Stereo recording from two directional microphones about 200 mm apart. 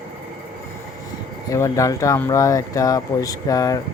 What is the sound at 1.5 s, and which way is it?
Speech, 15° left (ahead or behind).